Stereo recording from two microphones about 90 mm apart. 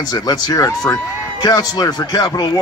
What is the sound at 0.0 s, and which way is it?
Speech, 45° left (ahead or behind).